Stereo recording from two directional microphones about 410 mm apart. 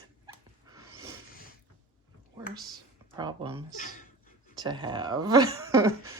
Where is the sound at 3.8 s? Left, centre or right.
Centre.